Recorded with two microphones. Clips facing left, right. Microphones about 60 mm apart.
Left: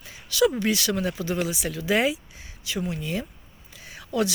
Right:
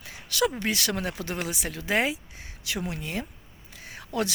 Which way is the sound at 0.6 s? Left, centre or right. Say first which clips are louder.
Left 4 dB; right.